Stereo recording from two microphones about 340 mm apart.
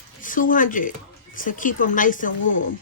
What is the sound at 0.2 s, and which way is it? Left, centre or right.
A woman's voice, left.